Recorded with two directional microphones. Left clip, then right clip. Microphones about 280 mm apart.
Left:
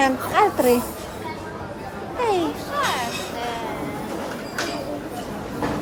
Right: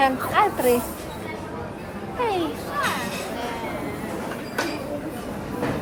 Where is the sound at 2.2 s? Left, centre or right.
Left.